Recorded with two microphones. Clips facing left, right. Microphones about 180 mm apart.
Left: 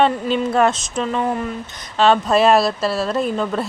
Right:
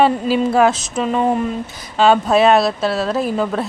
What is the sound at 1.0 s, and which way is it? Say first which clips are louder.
Speech: right 5 dB; 20° right (ahead or behind).